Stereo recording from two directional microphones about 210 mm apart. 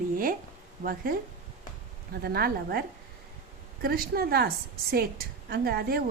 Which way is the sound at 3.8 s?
45° right (ahead or behind).